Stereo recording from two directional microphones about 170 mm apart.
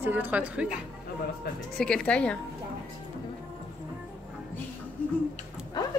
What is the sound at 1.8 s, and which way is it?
Speech, 5° left (ahead or behind).